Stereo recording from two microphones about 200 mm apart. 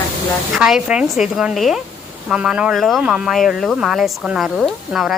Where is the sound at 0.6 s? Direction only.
5° right (ahead or behind).